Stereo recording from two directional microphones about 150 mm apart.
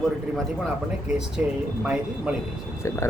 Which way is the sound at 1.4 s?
10° right (ahead or behind).